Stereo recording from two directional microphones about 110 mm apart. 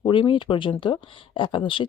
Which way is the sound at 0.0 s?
50° left (ahead or behind).